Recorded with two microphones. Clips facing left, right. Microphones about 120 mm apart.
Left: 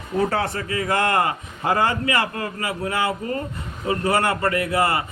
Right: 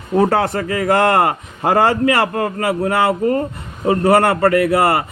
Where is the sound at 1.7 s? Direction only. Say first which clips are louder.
Right 7 dB; 30° right (ahead or behind).